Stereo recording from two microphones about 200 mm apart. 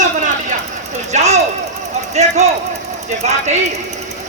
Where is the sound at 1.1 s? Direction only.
35° right (ahead or behind).